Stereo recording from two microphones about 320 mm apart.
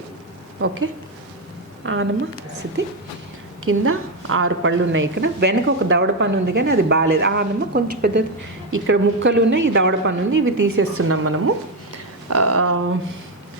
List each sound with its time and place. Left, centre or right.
1.8 s a woman's voice: right
3.7 s a woman's voice: right
12.3 s a sound: right